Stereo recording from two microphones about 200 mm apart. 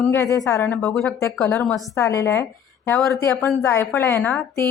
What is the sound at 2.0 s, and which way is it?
A woman's voice, 15° left (ahead or behind).